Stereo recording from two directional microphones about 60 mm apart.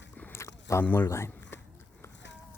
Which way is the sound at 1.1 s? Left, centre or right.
Left.